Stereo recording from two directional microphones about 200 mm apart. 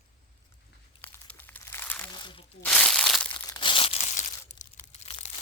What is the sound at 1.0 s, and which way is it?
Crumpling, 10° left (ahead or behind).